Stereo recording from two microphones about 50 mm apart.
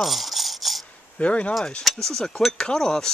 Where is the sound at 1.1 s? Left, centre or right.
Left.